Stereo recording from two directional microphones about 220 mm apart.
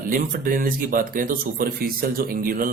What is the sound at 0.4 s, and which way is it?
A man's voice, 40° right (ahead or behind).